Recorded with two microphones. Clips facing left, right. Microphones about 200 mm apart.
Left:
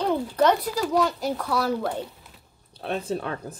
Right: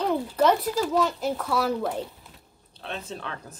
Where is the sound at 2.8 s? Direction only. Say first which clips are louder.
Left 7 dB; 45° left (ahead or behind).